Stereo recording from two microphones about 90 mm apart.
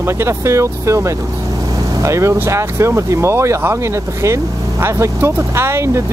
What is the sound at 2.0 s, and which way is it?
Speech, 35° right (ahead or behind).